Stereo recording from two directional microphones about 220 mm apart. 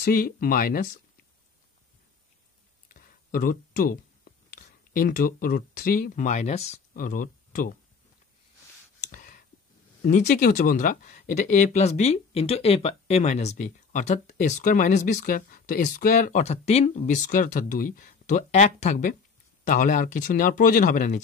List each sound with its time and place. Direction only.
0.0 s speech: 40° left (ahead or behind)
2.9 s speech: 40° left (ahead or behind)
9.0 s clicking: 35° left (ahead or behind)
10.0 s speech: 35° left (ahead or behind)